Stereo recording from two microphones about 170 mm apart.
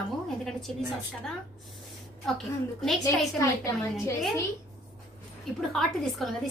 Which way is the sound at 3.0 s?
15° left (ahead or behind).